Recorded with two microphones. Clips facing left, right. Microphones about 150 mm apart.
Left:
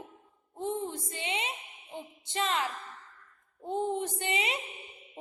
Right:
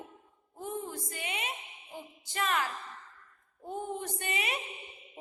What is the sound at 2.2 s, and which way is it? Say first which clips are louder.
Speech: left 1 dB; 25° left (ahead or behind).